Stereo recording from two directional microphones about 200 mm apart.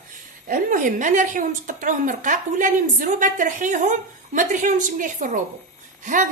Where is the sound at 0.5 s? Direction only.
40° right (ahead or behind).